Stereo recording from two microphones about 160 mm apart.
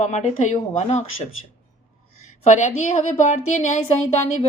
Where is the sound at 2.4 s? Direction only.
50° left (ahead or behind).